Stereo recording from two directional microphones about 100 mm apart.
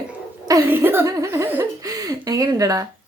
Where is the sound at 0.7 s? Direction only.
20° right (ahead or behind).